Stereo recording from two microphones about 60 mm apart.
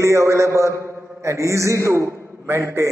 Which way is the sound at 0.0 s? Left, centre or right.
Right.